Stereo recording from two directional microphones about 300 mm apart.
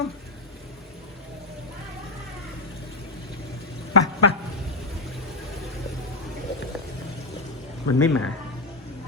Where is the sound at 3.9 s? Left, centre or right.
Left.